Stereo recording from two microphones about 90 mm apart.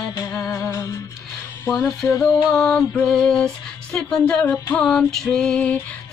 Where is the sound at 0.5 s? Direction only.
35° left (ahead or behind).